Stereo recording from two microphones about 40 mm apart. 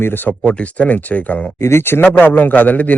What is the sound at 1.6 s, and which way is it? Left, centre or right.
Speech, left.